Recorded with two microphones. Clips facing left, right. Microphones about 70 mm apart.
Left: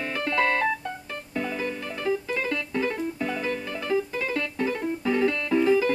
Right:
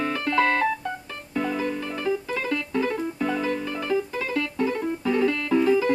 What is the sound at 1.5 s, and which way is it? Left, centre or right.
Music, right.